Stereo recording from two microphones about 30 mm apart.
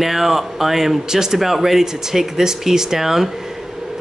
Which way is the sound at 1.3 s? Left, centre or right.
Centre.